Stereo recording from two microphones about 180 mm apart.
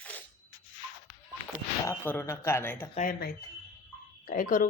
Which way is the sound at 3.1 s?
60° left (ahead or behind).